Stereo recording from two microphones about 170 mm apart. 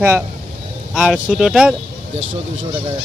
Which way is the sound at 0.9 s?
Centre (ahead or behind).